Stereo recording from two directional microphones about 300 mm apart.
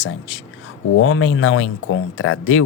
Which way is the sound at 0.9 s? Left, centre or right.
Left.